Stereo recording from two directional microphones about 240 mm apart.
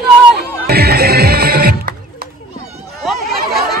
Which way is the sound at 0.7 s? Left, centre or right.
Right.